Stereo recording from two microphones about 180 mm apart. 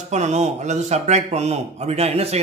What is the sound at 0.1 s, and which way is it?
A man's voice, 40° right (ahead or behind).